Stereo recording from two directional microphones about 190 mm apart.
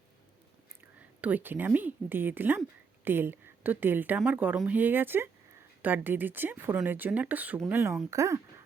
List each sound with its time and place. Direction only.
1.2 s a woman's voice: 10° right (ahead or behind)